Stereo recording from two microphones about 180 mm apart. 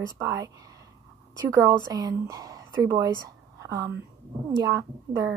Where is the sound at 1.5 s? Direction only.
20° right (ahead or behind).